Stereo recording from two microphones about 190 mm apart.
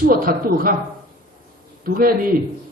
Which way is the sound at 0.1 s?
50° right (ahead or behind).